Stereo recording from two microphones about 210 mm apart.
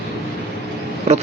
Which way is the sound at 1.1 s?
30° right (ahead or behind).